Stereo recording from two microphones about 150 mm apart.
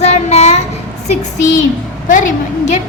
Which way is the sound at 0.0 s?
45° left (ahead or behind).